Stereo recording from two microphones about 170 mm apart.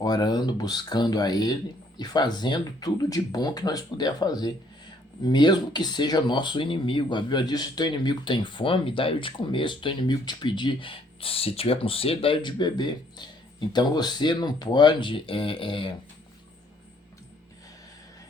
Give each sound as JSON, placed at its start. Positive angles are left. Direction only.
{"t": 0.0, "sound": "speech", "side_deg": 25}